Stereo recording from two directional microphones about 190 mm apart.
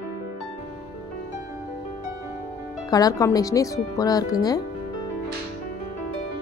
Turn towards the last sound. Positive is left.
turn(degrees=20)  # may be behind; listen again after turning